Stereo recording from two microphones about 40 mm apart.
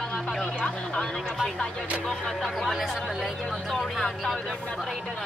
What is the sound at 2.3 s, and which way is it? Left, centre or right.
Speech, centre.